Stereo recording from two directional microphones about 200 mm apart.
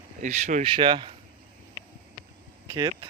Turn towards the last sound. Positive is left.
turn(degrees=-25)  # may be behind; listen again after turning